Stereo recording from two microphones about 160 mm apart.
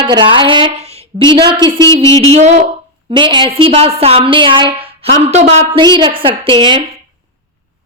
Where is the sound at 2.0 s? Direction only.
20° left (ahead or behind).